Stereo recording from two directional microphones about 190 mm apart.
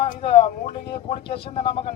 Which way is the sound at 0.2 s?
30° left (ahead or behind).